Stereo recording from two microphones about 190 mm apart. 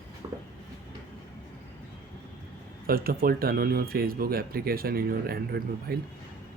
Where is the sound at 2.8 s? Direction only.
50° right (ahead or behind).